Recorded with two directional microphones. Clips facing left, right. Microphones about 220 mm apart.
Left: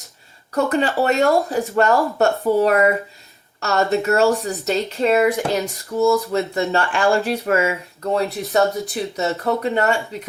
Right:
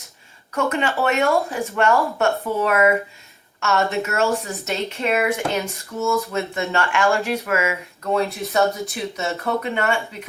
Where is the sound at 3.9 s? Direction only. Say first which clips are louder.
Left 5 dB; 35° left (ahead or behind).